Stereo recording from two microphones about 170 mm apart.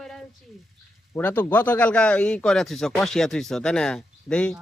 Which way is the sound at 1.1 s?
10° left (ahead or behind).